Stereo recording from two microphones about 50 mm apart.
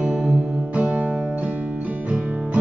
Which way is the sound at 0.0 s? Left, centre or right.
Centre.